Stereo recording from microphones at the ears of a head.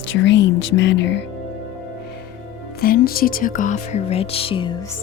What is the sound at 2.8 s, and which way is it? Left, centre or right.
Music, left.